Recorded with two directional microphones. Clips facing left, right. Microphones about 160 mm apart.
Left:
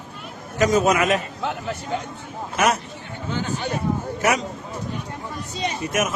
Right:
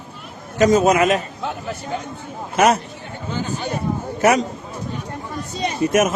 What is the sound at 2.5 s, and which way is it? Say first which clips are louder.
Speech: right 5 dB; 35° right (ahead or behind).